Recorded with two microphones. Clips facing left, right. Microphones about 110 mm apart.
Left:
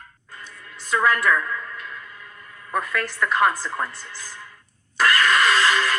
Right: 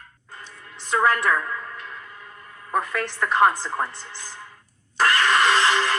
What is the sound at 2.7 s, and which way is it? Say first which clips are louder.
A woman's voice: right 1 dB; 30° right (ahead or behind).